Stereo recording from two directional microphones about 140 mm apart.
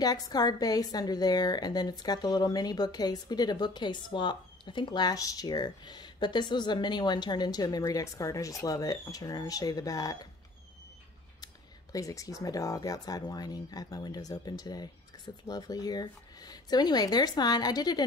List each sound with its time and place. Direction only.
0.0 s a woman's voice: 30° left (ahead or behind)
11.4 s a woman's voice: 25° left (ahead or behind)